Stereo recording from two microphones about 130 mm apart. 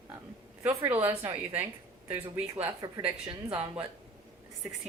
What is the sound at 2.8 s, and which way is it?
Speech, 30° right (ahead or behind).